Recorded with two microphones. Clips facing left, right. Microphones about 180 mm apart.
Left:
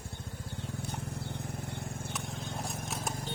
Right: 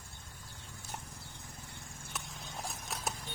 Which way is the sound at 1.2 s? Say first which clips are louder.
Left 12 dB; 65° left (ahead or behind).